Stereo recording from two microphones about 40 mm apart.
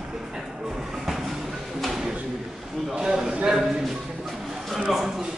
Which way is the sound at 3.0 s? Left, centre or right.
Centre.